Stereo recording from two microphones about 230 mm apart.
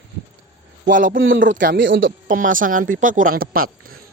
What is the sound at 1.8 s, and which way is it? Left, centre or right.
Speech, right.